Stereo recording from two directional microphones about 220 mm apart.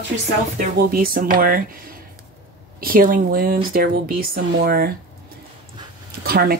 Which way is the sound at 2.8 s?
40° right (ahead or behind).